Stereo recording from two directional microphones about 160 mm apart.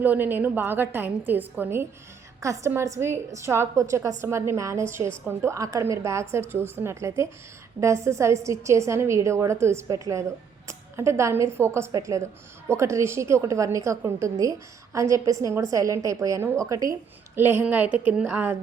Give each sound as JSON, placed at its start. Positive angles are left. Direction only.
{"t": 0.0, "sound": "a woman's voice", "side_deg": -10}